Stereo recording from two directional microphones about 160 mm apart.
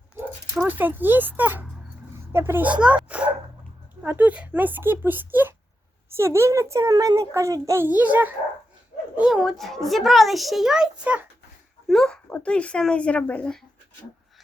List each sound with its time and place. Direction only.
0.5 s a child's voice: 10° right (ahead or behind); by 13.6 s 5° left (ahead or behind)